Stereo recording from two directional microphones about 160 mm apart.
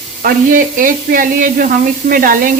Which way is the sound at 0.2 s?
60° right (ahead or behind).